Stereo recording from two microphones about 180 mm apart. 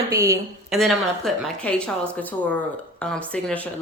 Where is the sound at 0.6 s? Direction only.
Centre (ahead or behind).